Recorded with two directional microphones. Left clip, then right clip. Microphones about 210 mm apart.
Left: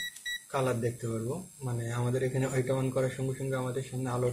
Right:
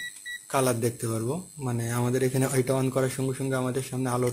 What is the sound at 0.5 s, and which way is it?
Speech, 45° right (ahead or behind).